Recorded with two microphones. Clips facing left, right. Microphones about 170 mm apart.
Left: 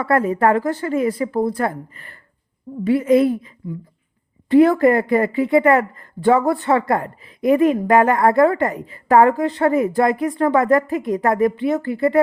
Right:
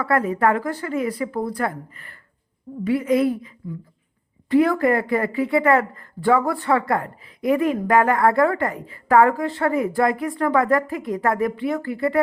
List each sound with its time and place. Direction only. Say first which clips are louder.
0.0 s a woman's voice: left 3 dB; 25° left (ahead or behind)